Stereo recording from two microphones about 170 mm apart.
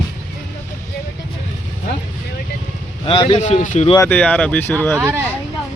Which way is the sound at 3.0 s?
35° left (ahead or behind).